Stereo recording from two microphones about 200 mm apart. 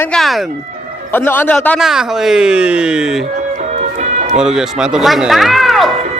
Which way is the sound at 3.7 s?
35° right (ahead or behind).